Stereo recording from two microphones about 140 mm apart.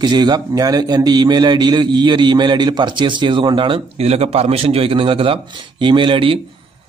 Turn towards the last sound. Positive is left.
turn(degrees=-35)  # may be behind; listen again after turning